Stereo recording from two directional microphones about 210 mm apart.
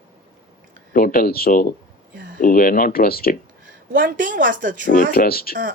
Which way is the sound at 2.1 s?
60° right (ahead or behind).